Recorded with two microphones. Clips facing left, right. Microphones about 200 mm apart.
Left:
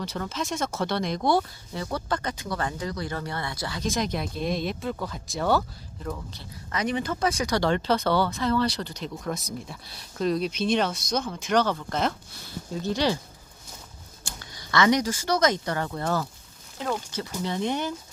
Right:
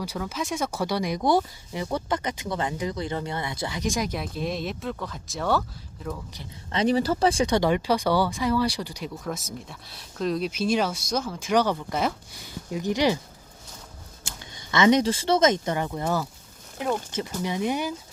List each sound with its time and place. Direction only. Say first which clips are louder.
0.0 s speech: right 1 dB; 10° right (ahead or behind)
6.7 s speech: right 5 dB; 30° right (ahead or behind)
7.6 s speech: right 1 dB; 10° right (ahead or behind)
14.7 s speech: right 3 dB; 20° right (ahead or behind)